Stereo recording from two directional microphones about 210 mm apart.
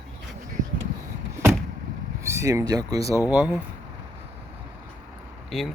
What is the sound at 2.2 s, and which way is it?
Speech, 15° right (ahead or behind).